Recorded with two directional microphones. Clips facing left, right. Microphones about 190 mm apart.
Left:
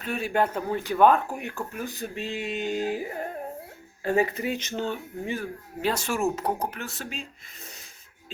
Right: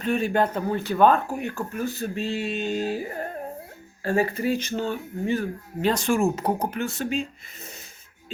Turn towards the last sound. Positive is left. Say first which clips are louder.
# right 10 dB
turn(degrees=0)  # may be behind; listen again after turning